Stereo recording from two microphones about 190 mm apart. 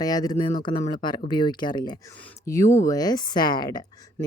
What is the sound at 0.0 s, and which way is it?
Speech, 20° left (ahead or behind).